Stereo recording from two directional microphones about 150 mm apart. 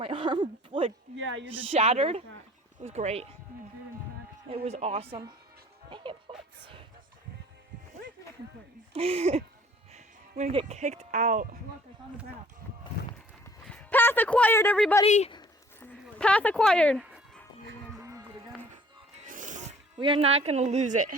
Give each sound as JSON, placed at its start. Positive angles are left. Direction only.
{"t": 0.0, "sound": "speech", "side_deg": -35}
{"t": 1.7, "sound": "speech", "side_deg": -45}
{"t": 4.4, "sound": "speech", "side_deg": -40}
{"t": 8.9, "sound": "speech", "side_deg": -40}
{"t": 9.9, "sound": "music", "side_deg": -50}
{"t": 10.5, "sound": "speech", "side_deg": -35}
{"t": 10.8, "sound": "speech", "side_deg": -50}
{"t": 13.4, "sound": "speech", "side_deg": 10}
{"t": 15.0, "sound": "speech", "side_deg": 45}
{"t": 15.8, "sound": "speech", "side_deg": 5}
{"t": 19.2, "sound": "music", "side_deg": -60}
{"t": 20.0, "sound": "speech", "side_deg": -35}